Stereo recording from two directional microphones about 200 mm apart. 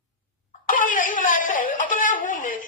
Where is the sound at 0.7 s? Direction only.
40° left (ahead or behind).